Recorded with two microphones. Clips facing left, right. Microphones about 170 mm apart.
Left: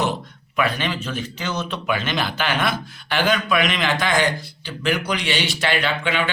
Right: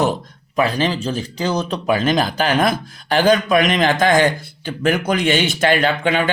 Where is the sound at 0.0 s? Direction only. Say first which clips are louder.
Right 5 dB; 45° right (ahead or behind).